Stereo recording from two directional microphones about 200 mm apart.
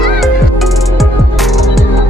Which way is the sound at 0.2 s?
Centre (ahead or behind).